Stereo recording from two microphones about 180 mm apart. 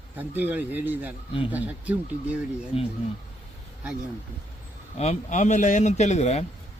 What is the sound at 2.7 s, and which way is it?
Speech, 30° left (ahead or behind).